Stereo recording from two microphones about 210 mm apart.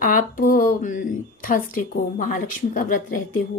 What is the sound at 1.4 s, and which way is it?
Speech, 40° left (ahead or behind).